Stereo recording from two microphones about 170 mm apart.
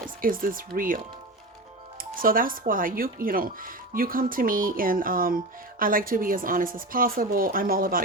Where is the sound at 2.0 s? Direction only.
55° right (ahead or behind).